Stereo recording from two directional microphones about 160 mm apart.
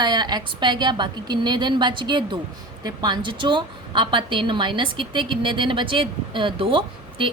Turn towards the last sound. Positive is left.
turn(degrees=-35)  # may be behind; listen again after turning